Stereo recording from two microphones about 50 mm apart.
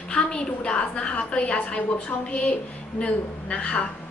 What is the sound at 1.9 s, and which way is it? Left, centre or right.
A woman's voice, left.